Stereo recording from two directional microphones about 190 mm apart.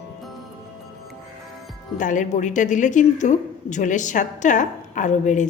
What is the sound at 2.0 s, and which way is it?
A woman's voice, 40° left (ahead or behind).